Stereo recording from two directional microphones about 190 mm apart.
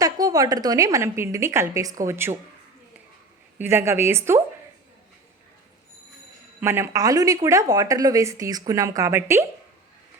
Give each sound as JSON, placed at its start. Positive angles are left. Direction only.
{"t": 0.0, "sound": "a woman's voice", "side_deg": -20}
{"t": 3.6, "sound": "a woman's voice", "side_deg": -15}
{"t": 6.6, "sound": "a woman's voice", "side_deg": -15}